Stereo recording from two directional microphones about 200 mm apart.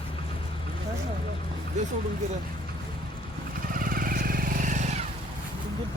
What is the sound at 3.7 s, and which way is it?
Vehicle, 45° right (ahead or behind).